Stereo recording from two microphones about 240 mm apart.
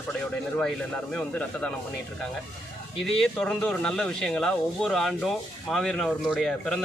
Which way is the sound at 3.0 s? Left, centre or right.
Centre.